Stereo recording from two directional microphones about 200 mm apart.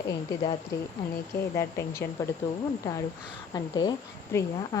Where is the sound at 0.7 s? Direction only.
15° left (ahead or behind).